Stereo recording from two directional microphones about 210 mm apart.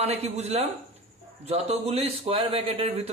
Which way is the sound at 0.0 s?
30° right (ahead or behind).